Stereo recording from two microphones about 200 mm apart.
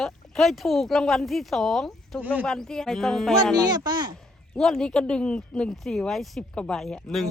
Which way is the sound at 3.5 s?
20° right (ahead or behind).